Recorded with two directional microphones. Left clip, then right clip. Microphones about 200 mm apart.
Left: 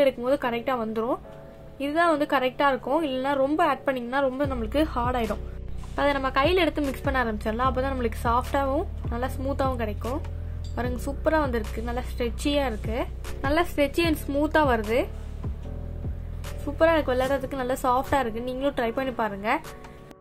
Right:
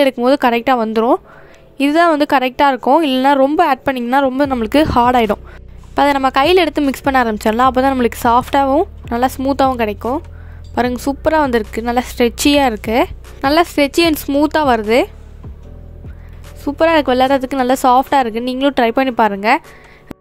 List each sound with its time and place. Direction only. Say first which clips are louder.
0.0 s a woman's voice: right 10 dB; 50° right (ahead or behind)
16.6 s a woman's voice: right 9 dB; 50° right (ahead or behind)